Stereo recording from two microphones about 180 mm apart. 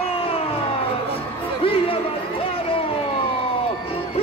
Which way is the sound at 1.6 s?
30° left (ahead or behind).